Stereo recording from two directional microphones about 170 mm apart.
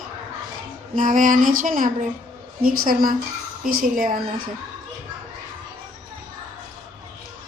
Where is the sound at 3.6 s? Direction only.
55° right (ahead or behind).